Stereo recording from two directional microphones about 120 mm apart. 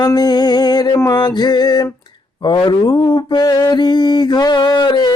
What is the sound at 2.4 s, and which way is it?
Mantra, 35° left (ahead or behind).